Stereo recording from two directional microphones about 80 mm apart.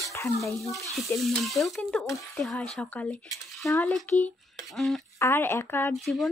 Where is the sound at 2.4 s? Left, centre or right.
Centre.